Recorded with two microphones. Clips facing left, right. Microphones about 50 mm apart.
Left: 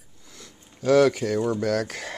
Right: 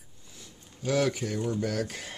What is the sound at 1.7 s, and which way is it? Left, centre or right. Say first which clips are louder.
Speech: left 6 dB; left.